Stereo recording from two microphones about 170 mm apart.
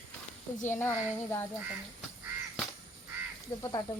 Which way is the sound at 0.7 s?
15° left (ahead or behind).